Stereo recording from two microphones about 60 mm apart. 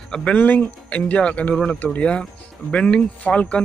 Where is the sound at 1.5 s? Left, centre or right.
Centre.